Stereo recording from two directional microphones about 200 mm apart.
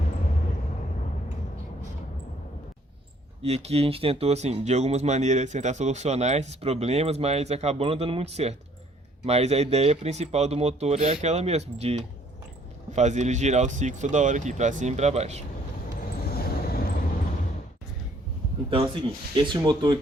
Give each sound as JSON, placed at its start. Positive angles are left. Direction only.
{"t": 3.4, "sound": "speech", "side_deg": -30}
{"t": 16.3, "sound": "vehicle", "side_deg": 50}
{"t": 18.7, "sound": "speech", "side_deg": -25}